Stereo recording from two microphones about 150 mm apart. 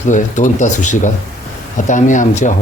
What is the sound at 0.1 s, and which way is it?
Speech, 55° left (ahead or behind).